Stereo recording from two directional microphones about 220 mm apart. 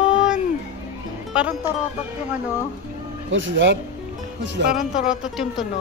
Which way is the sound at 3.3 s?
55° right (ahead or behind).